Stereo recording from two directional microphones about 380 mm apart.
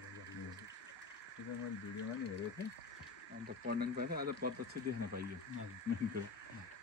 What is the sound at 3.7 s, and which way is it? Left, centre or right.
Speech, right.